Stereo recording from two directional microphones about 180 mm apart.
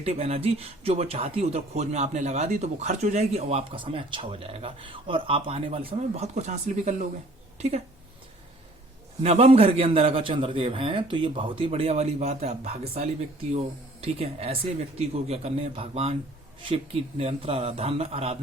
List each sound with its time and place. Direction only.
0.0 s speech: 35° right (ahead or behind)
9.2 s speech: 35° right (ahead or behind)